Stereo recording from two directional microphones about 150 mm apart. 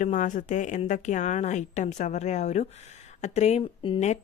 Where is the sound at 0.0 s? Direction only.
55° left (ahead or behind).